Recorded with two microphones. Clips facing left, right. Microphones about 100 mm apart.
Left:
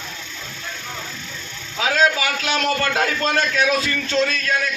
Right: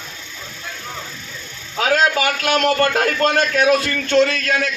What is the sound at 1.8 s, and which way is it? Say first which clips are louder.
A man's voice: right 2 dB; 50° right (ahead or behind).